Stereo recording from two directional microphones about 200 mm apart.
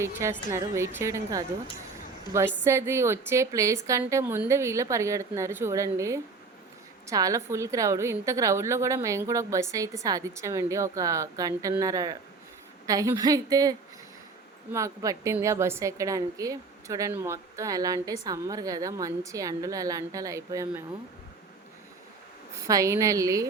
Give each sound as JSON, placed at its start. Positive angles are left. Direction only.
{"t": 0.0, "sound": "a woman's voice", "side_deg": -15}
{"t": 22.6, "sound": "a woman's voice", "side_deg": -15}